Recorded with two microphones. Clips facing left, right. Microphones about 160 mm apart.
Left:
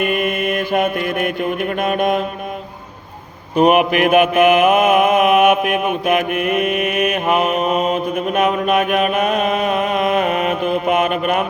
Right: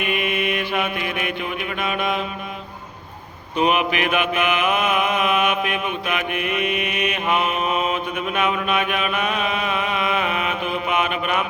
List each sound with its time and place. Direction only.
0.0 s mantra: 45° left (ahead or behind)
3.5 s mantra: 45° left (ahead or behind)